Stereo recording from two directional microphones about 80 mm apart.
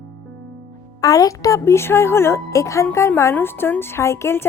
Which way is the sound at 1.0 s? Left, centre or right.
Left.